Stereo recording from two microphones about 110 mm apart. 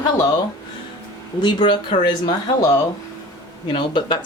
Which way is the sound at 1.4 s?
45° left (ahead or behind).